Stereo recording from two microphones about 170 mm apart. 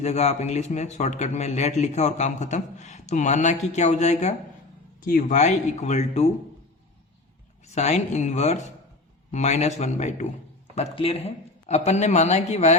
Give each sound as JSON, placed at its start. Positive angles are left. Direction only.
{"t": 0.0, "sound": "a man's voice", "side_deg": 40}
{"t": 7.6, "sound": "a man's voice", "side_deg": 40}